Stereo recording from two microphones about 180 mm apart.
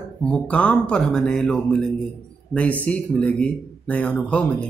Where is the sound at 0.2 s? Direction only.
5° left (ahead or behind).